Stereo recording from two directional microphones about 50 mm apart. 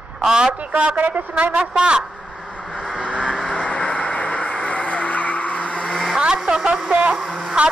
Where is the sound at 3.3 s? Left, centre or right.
Centre; by 5.9 s left.